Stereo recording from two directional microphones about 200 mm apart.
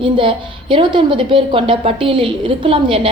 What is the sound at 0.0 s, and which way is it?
A woman's voice, 25° right (ahead or behind).